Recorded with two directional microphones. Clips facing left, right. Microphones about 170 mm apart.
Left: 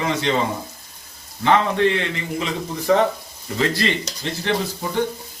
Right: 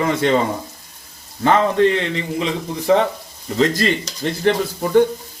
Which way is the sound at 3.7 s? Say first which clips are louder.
Right 3 dB; 45° right (ahead or behind).